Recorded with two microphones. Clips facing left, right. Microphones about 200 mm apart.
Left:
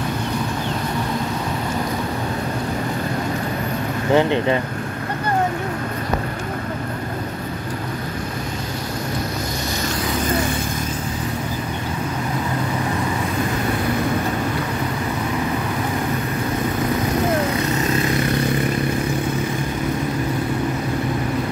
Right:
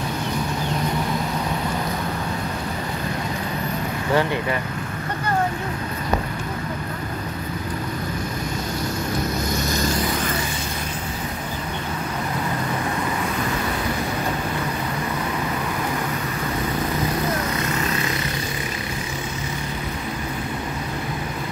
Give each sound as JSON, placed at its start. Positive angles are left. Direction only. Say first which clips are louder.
{"t": 4.1, "sound": "speech", "louder": "left 5 dB", "side_deg": 20}